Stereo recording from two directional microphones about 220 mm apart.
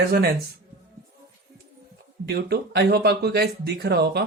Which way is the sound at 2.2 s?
45° right (ahead or behind).